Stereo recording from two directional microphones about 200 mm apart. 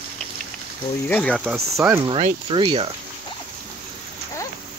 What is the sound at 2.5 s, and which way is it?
Speech, 25° right (ahead or behind).